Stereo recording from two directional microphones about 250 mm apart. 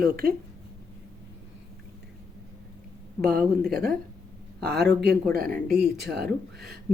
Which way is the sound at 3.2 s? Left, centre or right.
Right.